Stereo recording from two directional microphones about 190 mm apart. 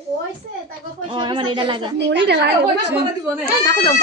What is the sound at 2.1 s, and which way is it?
Speech, 65° right (ahead or behind).